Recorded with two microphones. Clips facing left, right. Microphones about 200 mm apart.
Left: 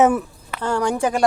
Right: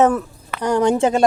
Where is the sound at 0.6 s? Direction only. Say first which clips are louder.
Right 4 dB; 20° right (ahead or behind).